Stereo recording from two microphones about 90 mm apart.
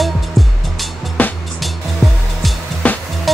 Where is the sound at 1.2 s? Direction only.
15° left (ahead or behind).